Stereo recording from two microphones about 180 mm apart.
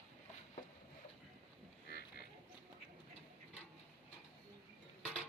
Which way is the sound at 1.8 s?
60° left (ahead or behind).